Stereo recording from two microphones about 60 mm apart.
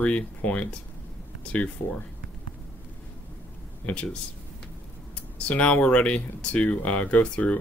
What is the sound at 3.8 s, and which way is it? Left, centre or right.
Speech, centre.